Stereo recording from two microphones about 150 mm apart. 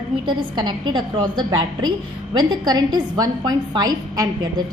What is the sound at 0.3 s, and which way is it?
A woman's voice, 30° right (ahead or behind).